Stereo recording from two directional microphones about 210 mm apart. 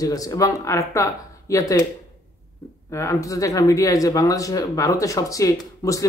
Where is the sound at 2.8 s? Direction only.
15° left (ahead or behind).